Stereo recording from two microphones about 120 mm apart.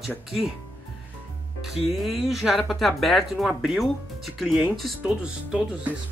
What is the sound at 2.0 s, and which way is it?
Speech, centre (ahead or behind).